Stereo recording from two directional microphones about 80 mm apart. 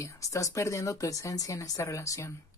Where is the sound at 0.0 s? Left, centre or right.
Left.